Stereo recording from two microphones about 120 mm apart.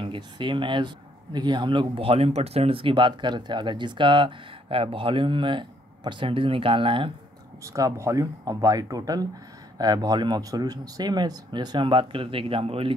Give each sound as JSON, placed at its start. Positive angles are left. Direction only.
{"t": 0.0, "sound": "speech", "side_deg": -45}
{"t": 7.6, "sound": "speech", "side_deg": -25}